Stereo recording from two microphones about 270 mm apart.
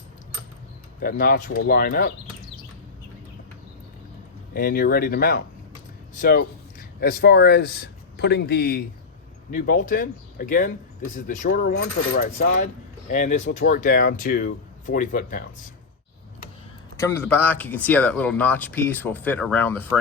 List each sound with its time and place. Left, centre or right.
1.0 s speech: left
4.5 s speech: left
17.0 s speech: centre